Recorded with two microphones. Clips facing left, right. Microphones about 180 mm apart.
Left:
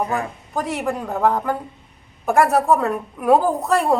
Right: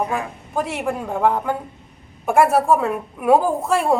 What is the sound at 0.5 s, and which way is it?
A woman's voice, 5° right (ahead or behind).